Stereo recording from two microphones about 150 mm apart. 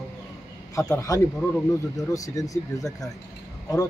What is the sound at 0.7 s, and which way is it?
Speech, 20° left (ahead or behind).